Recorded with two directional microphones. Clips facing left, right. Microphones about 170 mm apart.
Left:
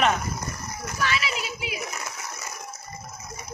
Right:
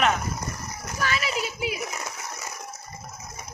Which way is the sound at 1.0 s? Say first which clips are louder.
Right 1 dB; 45° right (ahead or behind).